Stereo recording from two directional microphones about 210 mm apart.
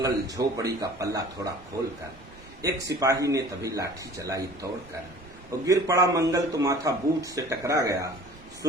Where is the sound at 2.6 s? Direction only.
15° right (ahead or behind).